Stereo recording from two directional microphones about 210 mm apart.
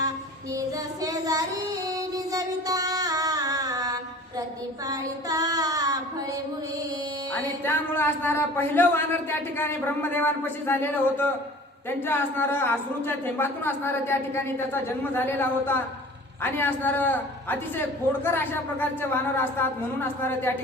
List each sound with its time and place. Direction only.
1.0 s child singing: 15° right (ahead or behind)
2.0 s music: 15° right (ahead or behind)
4.9 s child singing: 15° right (ahead or behind)
7.6 s a man's voice: 10° left (ahead or behind)